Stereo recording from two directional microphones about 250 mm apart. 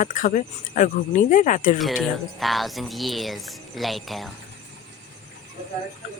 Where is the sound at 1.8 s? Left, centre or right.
Centre.